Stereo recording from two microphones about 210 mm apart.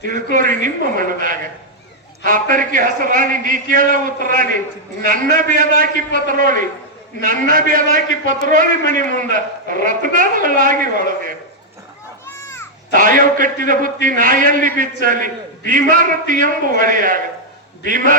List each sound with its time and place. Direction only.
0.0 s a man's voice: 40° right (ahead or behind)
12.2 s children playing: 10° left (ahead or behind)
12.9 s a man's voice: 40° right (ahead or behind)